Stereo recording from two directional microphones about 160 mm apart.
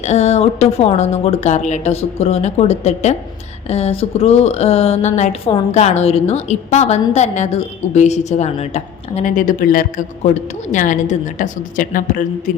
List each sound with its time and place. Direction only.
0.0 s a woman's voice: 45° left (ahead or behind)